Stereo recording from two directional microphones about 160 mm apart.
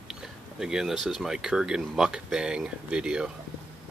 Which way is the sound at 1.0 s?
Centre (ahead or behind).